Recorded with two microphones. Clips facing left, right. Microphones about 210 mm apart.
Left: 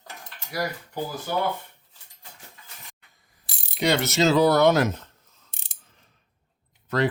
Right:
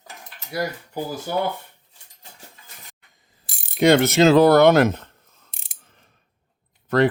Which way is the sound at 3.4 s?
50° right (ahead or behind).